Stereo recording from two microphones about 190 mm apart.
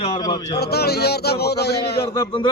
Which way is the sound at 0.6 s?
55° left (ahead or behind).